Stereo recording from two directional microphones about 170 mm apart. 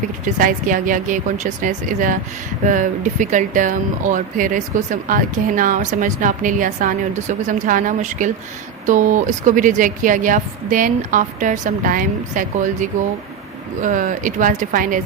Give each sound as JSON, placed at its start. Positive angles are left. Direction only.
{"t": 0.3, "sound": "speech", "side_deg": -55}